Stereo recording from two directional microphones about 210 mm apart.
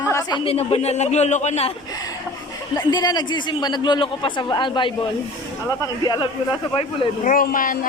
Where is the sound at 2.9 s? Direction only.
20° left (ahead or behind).